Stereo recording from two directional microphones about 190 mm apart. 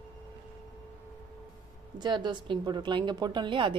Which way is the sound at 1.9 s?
25° right (ahead or behind).